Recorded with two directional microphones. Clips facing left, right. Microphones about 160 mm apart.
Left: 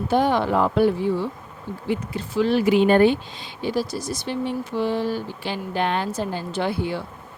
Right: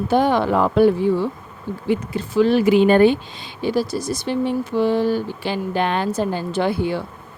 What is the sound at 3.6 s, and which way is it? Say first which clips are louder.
Speech: right 4 dB; 55° right (ahead or behind).